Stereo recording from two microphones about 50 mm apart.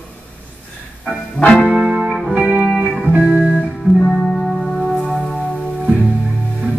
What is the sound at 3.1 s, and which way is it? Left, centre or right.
Music, right.